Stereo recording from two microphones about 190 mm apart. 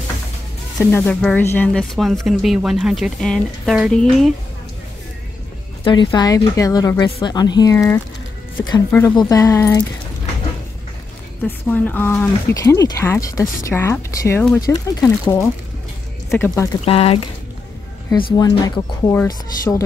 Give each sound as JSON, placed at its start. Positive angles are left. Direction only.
{"t": 0.7, "sound": "speech", "side_deg": 10}
{"t": 5.9, "sound": "a woman's voice", "side_deg": 25}
{"t": 11.4, "sound": "speech", "side_deg": 10}
{"t": 16.8, "sound": "speech", "side_deg": 30}
{"t": 18.3, "sound": "a woman's voice", "side_deg": 20}